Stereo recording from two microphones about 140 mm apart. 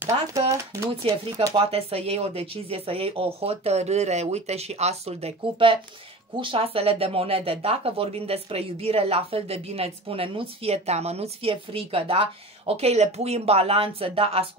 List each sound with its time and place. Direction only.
0.0 s speech: 20° right (ahead or behind)
1.0 s speech: 40° right (ahead or behind)